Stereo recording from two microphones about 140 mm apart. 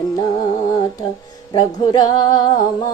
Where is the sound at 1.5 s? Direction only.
30° left (ahead or behind).